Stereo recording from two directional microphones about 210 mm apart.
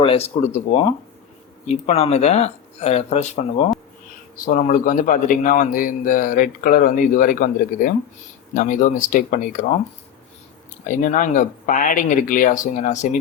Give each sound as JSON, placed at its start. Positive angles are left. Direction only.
{"t": 0.0, "sound": "speech", "side_deg": 30}
{"t": 1.6, "sound": "a man's voice", "side_deg": 30}
{"t": 10.8, "sound": "a man's voice", "side_deg": 35}